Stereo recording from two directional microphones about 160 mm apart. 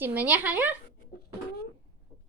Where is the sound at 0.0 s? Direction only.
10° right (ahead or behind).